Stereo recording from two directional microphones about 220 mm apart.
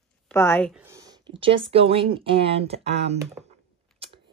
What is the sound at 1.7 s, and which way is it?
Speech, 25° right (ahead or behind).